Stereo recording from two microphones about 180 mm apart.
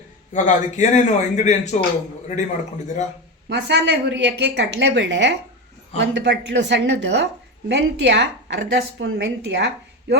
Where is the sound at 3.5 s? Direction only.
70° right (ahead or behind).